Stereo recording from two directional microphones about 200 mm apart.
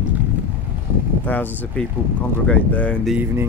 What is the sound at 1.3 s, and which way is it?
Speech, 10° left (ahead or behind).